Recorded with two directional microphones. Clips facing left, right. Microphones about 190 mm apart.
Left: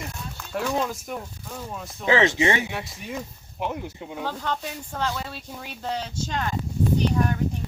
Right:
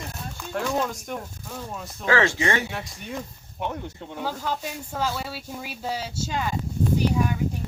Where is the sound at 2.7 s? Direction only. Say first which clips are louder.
Left 1 dB; 5° left (ahead or behind).